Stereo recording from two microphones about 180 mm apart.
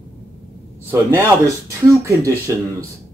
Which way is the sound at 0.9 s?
15° right (ahead or behind).